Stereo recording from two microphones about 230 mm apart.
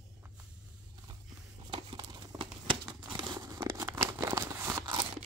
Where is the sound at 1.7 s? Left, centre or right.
Centre.